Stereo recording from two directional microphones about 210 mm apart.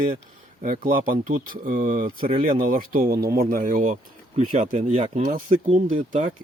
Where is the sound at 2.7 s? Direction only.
40° right (ahead or behind).